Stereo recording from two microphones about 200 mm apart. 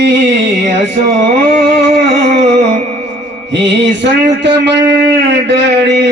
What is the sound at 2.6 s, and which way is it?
Music, 35° right (ahead or behind).